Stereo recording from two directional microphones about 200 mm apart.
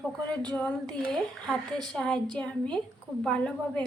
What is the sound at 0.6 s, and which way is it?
A woman's voice, 5° left (ahead or behind).